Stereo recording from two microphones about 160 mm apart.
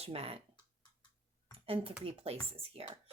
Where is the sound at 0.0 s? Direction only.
40° right (ahead or behind).